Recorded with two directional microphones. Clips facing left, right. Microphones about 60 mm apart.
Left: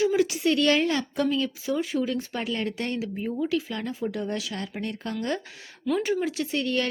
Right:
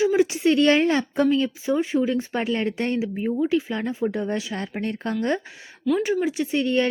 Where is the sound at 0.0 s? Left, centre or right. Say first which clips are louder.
Right 3 dB; right.